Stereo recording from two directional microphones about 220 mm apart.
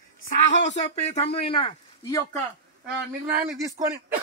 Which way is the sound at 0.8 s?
25° left (ahead or behind).